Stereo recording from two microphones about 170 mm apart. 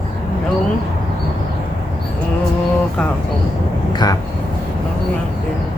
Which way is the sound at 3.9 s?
25° left (ahead or behind).